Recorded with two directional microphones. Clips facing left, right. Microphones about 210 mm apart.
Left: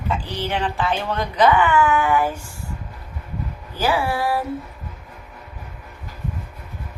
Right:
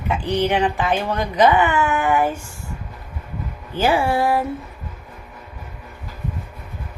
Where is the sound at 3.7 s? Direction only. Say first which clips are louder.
Right 3 dB; 25° right (ahead or behind).